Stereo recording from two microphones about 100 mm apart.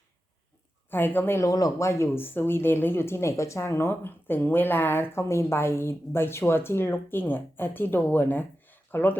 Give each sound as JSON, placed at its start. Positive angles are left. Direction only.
{"t": 0.9, "sound": "speech", "side_deg": 20}
{"t": 1.5, "sound": "speech", "side_deg": 35}